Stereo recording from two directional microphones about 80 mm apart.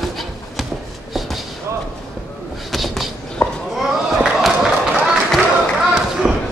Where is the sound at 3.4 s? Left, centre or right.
Left.